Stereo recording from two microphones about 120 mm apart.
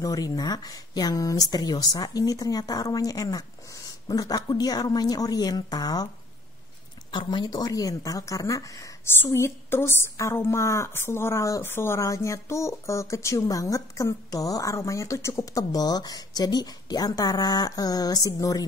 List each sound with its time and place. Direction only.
0.0 s speech: 30° left (ahead or behind)
7.1 s speech: 40° left (ahead or behind)